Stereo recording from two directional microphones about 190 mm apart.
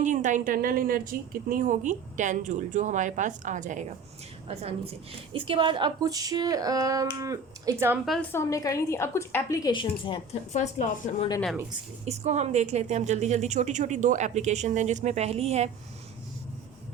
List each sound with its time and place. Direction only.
0.0 s a woman's voice: 40° right (ahead or behind)
5.3 s speech: 25° right (ahead or behind)
8.0 s a woman's voice: centre (ahead or behind)
8.3 s a woman's voice: 15° left (ahead or behind)
10.5 s a woman's voice: 40° left (ahead or behind)
12.0 s a woman's voice: 35° right (ahead or behind)